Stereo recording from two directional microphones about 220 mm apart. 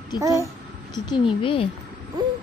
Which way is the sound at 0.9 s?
20° left (ahead or behind).